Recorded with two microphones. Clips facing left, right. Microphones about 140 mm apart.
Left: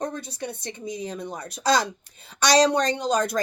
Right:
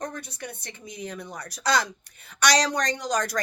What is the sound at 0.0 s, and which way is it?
Speech, 25° left (ahead or behind).